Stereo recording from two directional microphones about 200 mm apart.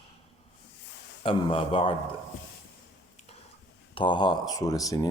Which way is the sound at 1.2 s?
25° left (ahead or behind).